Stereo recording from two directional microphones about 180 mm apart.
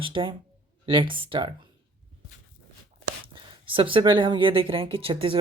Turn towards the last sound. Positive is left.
turn(degrees=-30)  # may be behind; listen again after turning